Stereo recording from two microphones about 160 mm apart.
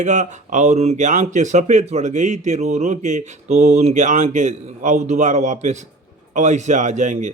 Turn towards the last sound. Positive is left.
turn(degrees=-50)  # may be behind; listen again after turning